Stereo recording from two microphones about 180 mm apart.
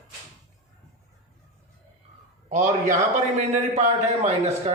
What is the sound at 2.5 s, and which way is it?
A man's voice, 40° right (ahead or behind).